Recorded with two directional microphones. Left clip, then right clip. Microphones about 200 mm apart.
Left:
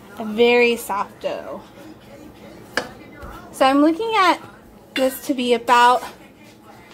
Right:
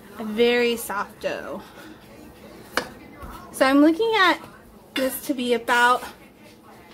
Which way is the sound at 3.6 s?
10° right (ahead or behind).